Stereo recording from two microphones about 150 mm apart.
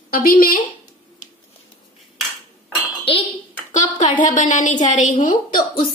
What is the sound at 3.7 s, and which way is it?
A woman's voice, 55° left (ahead or behind).